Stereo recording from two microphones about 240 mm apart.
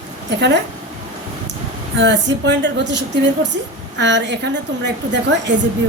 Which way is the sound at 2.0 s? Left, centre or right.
Right.